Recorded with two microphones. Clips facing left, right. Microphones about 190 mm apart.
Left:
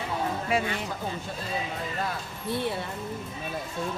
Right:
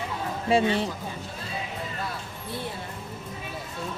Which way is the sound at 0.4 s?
30° right (ahead or behind).